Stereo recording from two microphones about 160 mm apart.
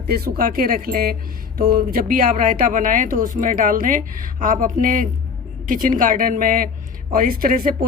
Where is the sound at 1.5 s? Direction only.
65° right (ahead or behind).